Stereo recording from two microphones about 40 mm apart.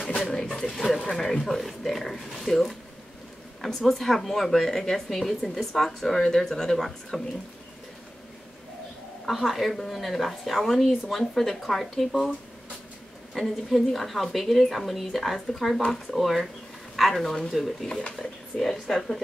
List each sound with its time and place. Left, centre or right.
0.2 s pigeon: centre
0.7 s speech: centre
9.3 s speech: centre
13.3 s speech: centre